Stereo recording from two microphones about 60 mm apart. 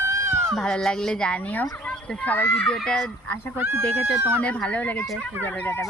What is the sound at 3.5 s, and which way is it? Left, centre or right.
Speech, right.